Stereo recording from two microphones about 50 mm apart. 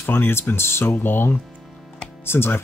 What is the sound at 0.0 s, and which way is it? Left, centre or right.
Speech, left.